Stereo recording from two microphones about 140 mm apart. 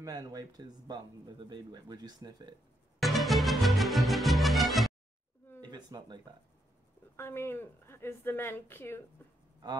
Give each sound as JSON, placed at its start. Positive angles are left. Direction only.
{"t": 0.0, "sound": "speech", "side_deg": -25}
{"t": 3.0, "sound": "music", "side_deg": 0}
{"t": 5.6, "sound": "speech", "side_deg": -30}
{"t": 7.2, "sound": "a woman's voice", "side_deg": 15}